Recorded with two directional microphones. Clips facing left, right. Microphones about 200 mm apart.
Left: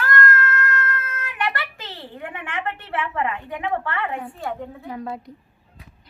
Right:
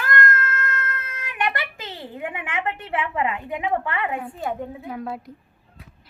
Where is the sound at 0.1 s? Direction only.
20° right (ahead or behind).